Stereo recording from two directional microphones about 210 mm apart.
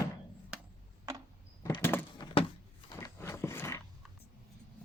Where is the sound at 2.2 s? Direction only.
25° left (ahead or behind).